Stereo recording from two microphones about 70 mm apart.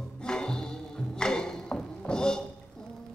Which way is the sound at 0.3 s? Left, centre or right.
Centre.